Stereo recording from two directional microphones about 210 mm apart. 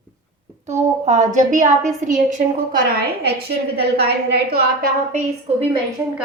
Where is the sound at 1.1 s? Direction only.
35° right (ahead or behind).